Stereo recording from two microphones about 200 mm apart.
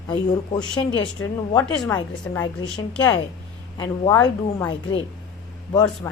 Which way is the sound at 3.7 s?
20° left (ahead or behind).